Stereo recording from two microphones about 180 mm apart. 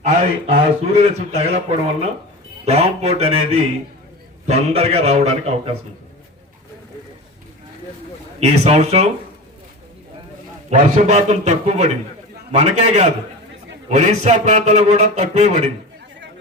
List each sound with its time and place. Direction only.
0.5 s a man's voice: 35° right (ahead or behind)
8.4 s a man's voice: 35° right (ahead or behind)
10.7 s a man's voice: 40° right (ahead or behind)